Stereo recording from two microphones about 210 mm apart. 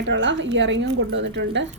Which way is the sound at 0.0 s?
60° right (ahead or behind).